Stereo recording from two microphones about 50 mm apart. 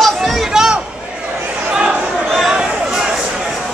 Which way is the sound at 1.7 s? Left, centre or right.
Centre.